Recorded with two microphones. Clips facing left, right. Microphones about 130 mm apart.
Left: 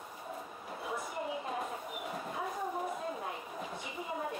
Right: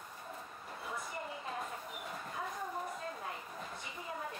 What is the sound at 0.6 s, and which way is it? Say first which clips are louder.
Dog: left 4 dB; 5° left (ahead or behind).